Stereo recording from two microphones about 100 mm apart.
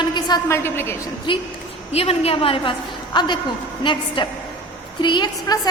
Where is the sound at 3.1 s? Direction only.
50° left (ahead or behind).